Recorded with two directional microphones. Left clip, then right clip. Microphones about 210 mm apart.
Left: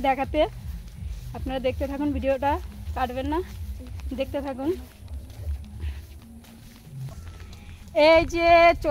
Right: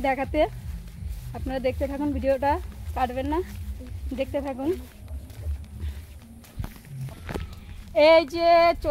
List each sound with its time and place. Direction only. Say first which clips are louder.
0.0 s speech: left 1 dB; 10° left (ahead or behind)
7.9 s female singing: even; 20° left (ahead or behind)